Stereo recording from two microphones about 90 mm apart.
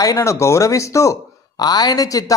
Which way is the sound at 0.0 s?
40° left (ahead or behind).